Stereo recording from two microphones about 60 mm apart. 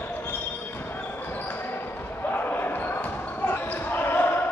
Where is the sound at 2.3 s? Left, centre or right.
Left.